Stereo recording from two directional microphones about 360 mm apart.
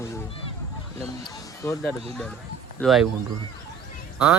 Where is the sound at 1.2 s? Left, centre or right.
Centre.